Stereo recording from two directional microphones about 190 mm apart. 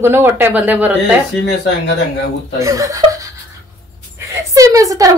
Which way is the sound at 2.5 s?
15° right (ahead or behind).